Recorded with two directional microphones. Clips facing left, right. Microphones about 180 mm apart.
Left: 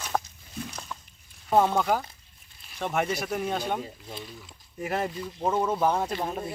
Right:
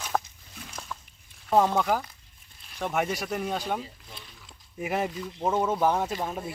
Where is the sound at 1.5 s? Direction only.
Centre (ahead or behind).